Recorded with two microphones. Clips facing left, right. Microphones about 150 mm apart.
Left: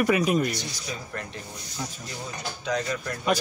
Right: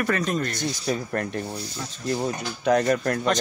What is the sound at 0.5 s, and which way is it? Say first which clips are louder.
Speech: right 8 dB; 55° right (ahead or behind).